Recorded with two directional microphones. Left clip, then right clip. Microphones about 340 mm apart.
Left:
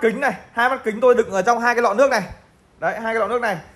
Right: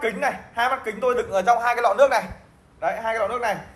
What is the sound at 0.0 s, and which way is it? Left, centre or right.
A man's voice, left.